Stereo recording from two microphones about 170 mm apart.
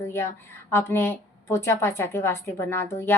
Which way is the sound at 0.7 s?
15° left (ahead or behind).